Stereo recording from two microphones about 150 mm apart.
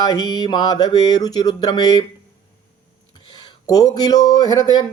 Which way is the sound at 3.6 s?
25° left (ahead or behind).